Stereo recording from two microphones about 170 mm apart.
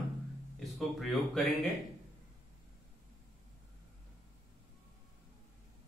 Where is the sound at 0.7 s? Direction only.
Centre (ahead or behind).